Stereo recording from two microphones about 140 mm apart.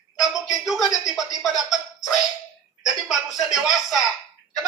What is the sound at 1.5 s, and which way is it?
Speech, centre (ahead or behind).